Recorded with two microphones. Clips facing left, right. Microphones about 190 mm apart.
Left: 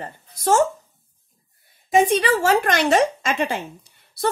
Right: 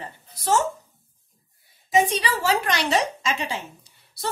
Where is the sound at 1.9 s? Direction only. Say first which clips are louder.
Left 5 dB; 50° left (ahead or behind).